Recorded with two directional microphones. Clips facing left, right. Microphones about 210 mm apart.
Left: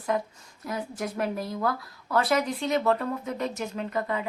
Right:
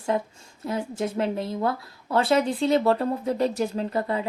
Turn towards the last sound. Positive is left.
turn(degrees=-30)  # may be behind; listen again after turning